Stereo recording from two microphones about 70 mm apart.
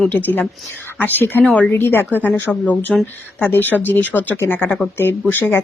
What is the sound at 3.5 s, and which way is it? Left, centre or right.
A woman's voice, left.